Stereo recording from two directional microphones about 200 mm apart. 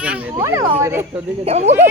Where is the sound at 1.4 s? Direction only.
35° right (ahead or behind).